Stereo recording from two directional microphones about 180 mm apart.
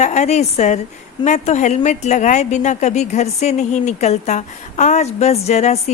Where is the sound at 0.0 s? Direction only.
40° left (ahead or behind).